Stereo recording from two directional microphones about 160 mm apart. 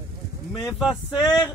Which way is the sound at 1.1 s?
25° left (ahead or behind).